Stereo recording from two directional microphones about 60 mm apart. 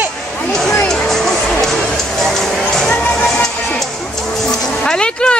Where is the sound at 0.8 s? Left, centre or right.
Centre.